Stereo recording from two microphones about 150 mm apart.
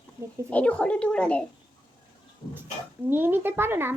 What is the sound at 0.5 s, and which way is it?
Speech, 10° left (ahead or behind).